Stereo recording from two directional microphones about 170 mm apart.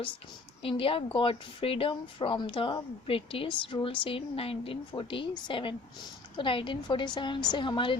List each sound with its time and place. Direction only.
0.6 s a woman's voice: 30° left (ahead or behind)